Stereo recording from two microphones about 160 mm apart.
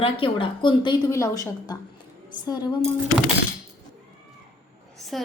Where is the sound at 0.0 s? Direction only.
35° left (ahead or behind).